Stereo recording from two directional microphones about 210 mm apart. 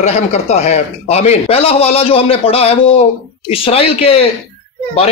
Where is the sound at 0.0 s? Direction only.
30° left (ahead or behind).